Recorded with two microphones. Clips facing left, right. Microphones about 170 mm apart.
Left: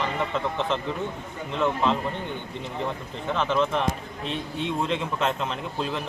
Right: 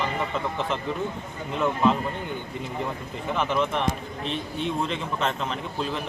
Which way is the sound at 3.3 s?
10° right (ahead or behind).